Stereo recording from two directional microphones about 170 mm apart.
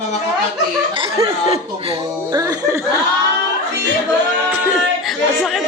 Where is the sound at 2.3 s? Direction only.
20° right (ahead or behind).